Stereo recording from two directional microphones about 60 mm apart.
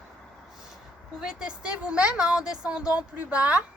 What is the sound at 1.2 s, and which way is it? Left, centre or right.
A woman's voice, centre.